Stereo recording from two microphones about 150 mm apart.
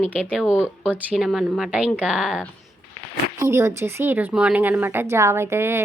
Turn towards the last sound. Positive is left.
turn(degrees=-15)  # may be behind; listen again after turning